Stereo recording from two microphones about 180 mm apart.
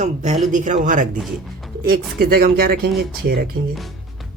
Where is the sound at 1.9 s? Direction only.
60° right (ahead or behind).